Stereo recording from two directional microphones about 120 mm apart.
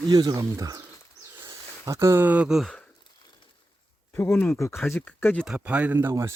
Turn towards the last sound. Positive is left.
turn(degrees=-15)  # may be behind; listen again after turning